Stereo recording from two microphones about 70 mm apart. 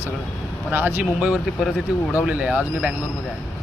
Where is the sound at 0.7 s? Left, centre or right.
Right.